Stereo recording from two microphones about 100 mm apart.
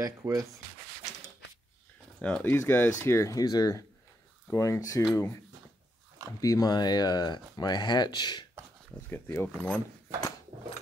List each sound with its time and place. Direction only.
0.0 s sanding: 35° right (ahead or behind)
2.2 s speech: 15° left (ahead or behind)
6.4 s speech: 35° left (ahead or behind)
9.1 s speech: 20° left (ahead or behind)